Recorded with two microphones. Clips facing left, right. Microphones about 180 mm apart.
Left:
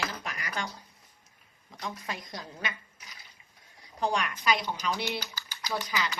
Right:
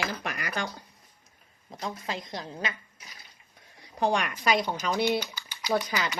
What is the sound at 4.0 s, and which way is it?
Speech, 55° right (ahead or behind).